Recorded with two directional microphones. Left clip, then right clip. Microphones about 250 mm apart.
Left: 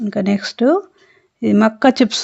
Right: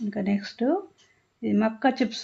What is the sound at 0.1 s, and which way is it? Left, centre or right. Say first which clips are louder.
Speech: left 11 dB; left.